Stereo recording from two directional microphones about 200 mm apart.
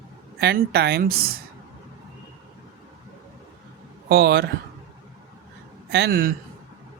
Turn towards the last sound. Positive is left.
turn(degrees=-50)  # may be behind; listen again after turning